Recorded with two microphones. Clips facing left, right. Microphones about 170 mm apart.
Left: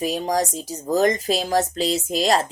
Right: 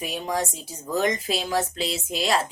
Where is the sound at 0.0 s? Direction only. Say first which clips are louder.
Left 5 dB; 40° left (ahead or behind).